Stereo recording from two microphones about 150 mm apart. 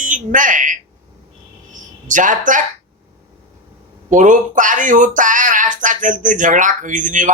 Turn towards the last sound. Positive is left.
turn(degrees=-60)  # may be behind; listen again after turning